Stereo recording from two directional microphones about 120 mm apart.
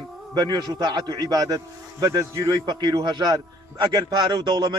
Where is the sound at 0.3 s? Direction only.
35° right (ahead or behind).